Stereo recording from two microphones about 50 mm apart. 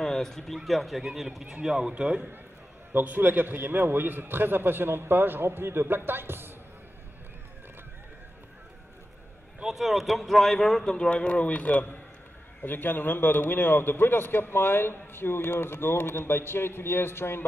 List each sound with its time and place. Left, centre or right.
0.0 s speech: centre
2.9 s a man's voice: right
9.7 s a man's voice: centre; by 17.5 s left